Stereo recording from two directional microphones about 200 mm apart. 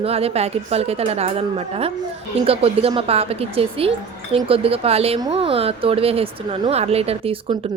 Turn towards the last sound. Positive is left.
turn(degrees=-30)  # may be behind; listen again after turning